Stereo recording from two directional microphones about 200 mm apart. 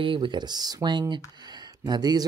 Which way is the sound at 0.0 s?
25° right (ahead or behind).